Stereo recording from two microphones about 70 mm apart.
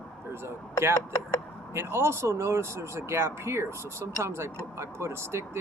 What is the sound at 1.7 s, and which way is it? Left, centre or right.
Speech, right.